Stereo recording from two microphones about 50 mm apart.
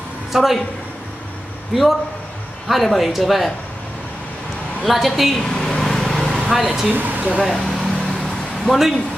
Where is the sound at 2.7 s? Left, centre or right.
Centre.